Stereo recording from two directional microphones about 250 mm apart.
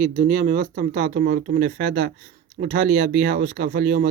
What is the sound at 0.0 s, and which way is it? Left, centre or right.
Speech, right.